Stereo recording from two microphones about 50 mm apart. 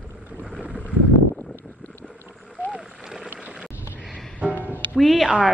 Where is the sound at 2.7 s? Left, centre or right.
Centre.